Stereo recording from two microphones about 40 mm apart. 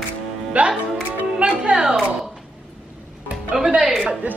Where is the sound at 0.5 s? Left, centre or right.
Right.